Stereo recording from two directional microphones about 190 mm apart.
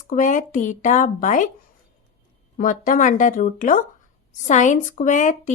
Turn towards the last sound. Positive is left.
turn(degrees=40)  # may be behind; listen again after turning